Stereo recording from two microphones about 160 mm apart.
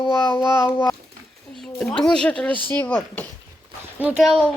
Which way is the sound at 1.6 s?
5° left (ahead or behind).